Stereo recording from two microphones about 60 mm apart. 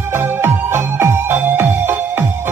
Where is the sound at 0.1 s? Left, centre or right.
Right.